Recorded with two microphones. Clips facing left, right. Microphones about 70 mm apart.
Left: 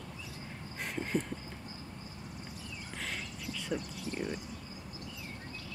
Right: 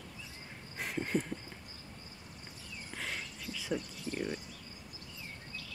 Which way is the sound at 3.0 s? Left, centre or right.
Centre.